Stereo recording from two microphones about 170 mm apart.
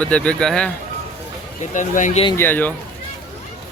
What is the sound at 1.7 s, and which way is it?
Speech, 45° left (ahead or behind).